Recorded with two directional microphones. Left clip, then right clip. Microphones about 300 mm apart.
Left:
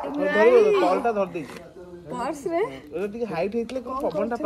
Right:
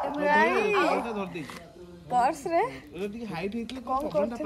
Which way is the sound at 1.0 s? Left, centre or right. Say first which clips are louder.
Left 10 dB; centre.